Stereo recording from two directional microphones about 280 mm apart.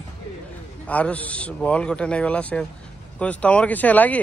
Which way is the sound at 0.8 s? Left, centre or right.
Centre.